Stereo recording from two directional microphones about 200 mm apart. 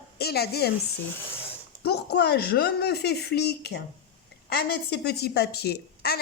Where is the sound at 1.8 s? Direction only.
55° left (ahead or behind).